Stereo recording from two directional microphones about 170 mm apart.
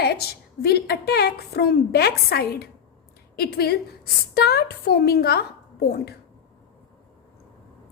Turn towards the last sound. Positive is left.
turn(degrees=65)  # may be behind; listen again after turning